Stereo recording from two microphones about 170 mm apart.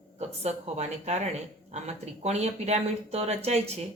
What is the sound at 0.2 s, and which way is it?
Speech, 40° right (ahead or behind).